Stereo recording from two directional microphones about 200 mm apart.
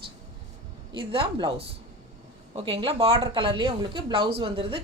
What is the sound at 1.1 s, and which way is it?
A woman's voice, 25° right (ahead or behind).